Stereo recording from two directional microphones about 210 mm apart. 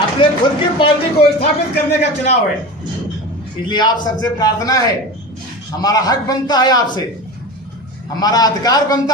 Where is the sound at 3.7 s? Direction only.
20° left (ahead or behind).